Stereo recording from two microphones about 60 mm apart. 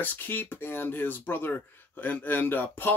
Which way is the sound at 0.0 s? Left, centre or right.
Left.